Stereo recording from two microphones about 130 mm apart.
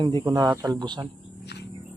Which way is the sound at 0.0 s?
35° right (ahead or behind).